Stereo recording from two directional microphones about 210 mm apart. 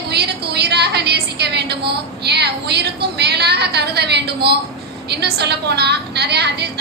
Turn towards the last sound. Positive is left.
turn(degrees=-50)  # may be behind; listen again after turning